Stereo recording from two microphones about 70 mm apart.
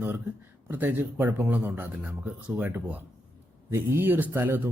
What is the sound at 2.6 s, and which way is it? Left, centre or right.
Speech, right.